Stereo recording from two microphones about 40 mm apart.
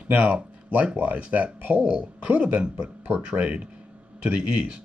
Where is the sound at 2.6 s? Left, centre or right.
Right.